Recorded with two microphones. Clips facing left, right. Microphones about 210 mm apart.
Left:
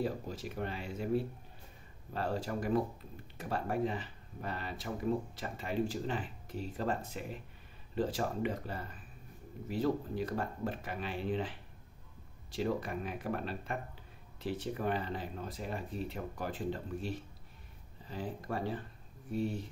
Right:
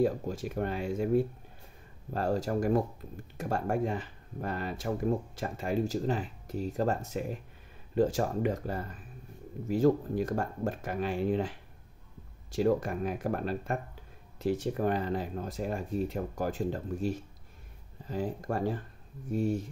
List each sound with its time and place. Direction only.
0.0 s speech: 45° right (ahead or behind)